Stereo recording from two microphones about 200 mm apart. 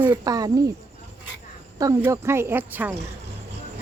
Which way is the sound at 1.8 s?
15° right (ahead or behind).